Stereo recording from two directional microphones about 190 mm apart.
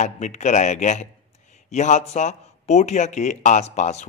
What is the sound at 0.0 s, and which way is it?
Speech, 40° left (ahead or behind).